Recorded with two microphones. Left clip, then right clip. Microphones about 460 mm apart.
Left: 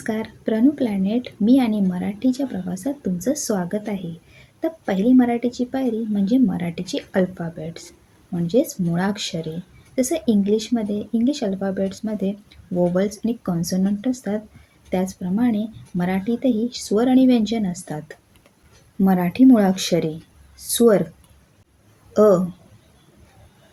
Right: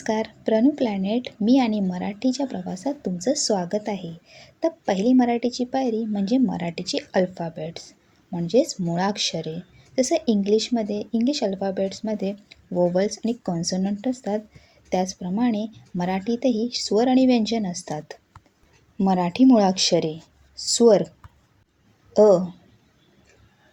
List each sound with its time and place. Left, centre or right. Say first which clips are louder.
0.0 s speech: right 1 dB; left
22.1 s speech: even; left